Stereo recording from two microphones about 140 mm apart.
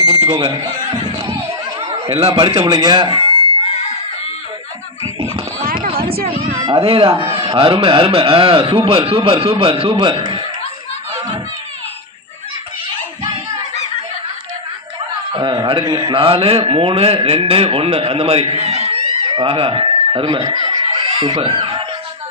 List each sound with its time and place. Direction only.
0.0 s smoke detector: 40° right (ahead or behind)
2.0 s a man's voice: 40° right (ahead or behind)
6.2 s a man's voice: 40° right (ahead or behind)
15.3 s chuckle: 35° right (ahead or behind)
15.8 s a man's voice: 35° right (ahead or behind)
20.7 s snicker: 35° right (ahead or behind)